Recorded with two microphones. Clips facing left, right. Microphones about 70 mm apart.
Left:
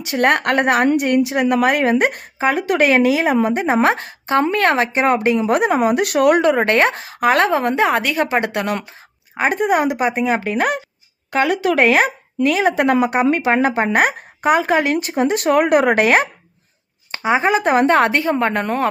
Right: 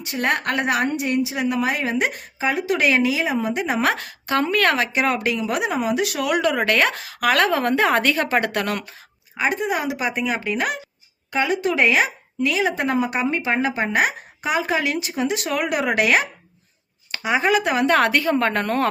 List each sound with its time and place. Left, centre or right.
0.0 s a woman's voice: left
6.4 s a woman's voice: left
9.3 s a woman's voice: left
11.3 s a woman's voice: left
17.1 s speech: left